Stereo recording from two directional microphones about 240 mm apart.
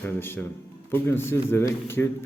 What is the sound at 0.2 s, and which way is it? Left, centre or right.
A man's voice, centre.